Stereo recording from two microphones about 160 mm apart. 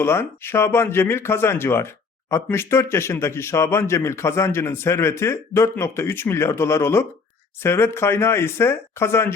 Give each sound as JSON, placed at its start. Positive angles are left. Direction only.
{"t": 0.0, "sound": "a man's voice", "side_deg": 15}